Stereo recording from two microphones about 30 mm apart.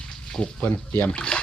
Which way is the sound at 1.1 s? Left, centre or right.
Left.